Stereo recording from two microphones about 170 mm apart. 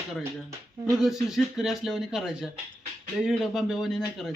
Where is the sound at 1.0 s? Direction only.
Centre (ahead or behind).